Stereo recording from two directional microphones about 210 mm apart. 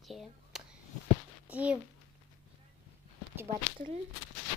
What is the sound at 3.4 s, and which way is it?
Speech, 30° right (ahead or behind).